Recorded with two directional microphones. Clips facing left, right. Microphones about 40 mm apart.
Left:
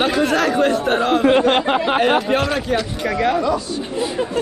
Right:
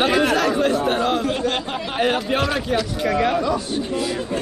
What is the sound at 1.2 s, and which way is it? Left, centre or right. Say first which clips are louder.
Speech: left 8 dB; left.